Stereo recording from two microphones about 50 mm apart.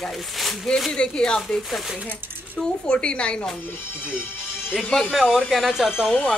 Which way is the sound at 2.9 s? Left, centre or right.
Left.